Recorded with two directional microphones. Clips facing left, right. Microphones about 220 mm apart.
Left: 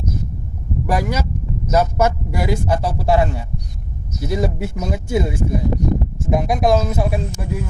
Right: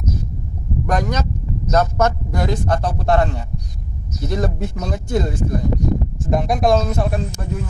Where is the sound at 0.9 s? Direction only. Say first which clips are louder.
Even; 10° left (ahead or behind).